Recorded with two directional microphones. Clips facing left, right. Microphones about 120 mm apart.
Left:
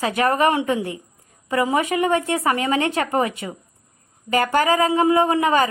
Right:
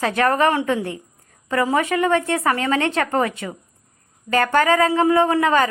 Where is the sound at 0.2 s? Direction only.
15° left (ahead or behind).